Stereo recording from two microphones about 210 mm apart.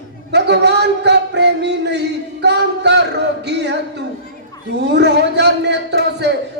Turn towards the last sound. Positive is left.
turn(degrees=-55)  # may be behind; listen again after turning